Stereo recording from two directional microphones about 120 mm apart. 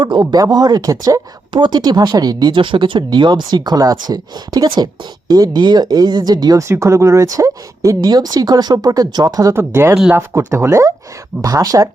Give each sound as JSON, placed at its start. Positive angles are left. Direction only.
{"t": 0.0, "sound": "speech", "side_deg": -35}